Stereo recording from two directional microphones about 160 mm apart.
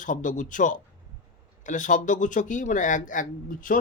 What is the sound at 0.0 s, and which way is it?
Speech, 55° left (ahead or behind).